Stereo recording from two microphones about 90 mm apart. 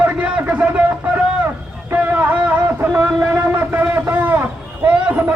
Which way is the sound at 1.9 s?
15° right (ahead or behind).